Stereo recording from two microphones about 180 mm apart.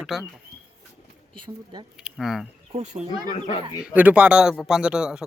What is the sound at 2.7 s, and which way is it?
Speech, 40° right (ahead or behind).